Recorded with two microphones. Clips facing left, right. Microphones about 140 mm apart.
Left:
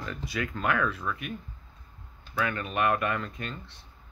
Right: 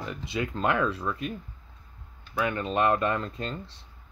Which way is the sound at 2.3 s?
20° right (ahead or behind).